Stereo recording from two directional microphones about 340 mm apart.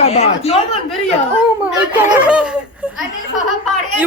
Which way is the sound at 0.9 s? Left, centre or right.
Centre.